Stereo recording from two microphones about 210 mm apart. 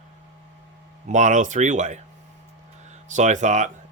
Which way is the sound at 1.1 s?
35° right (ahead or behind).